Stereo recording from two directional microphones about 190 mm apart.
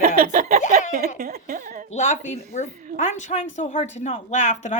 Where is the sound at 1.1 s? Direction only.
55° right (ahead or behind).